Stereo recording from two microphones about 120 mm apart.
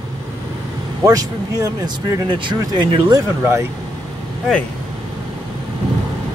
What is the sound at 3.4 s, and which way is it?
Speech, 20° right (ahead or behind).